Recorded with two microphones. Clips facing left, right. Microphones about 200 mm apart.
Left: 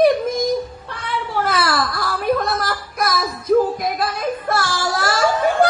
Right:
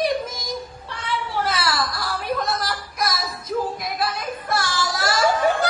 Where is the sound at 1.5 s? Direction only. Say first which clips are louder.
Left 6 dB; 55° left (ahead or behind).